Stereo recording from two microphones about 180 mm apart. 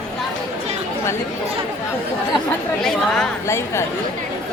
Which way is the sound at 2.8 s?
5° left (ahead or behind).